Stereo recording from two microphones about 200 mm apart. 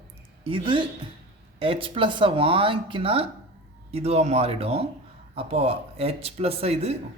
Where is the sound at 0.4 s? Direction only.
25° right (ahead or behind).